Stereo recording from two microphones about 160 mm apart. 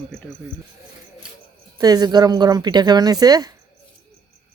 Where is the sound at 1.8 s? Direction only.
25° right (ahead or behind).